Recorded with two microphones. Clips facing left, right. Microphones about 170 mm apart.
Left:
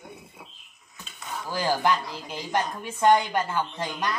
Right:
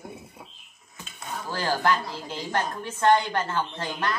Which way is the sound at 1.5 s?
15° left (ahead or behind).